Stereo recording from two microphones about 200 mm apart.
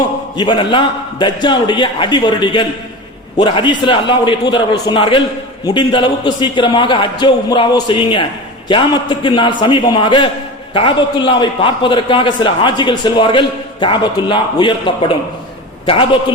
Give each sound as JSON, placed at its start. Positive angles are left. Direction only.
{"t": 0.3, "sound": "a man's voice", "side_deg": 25}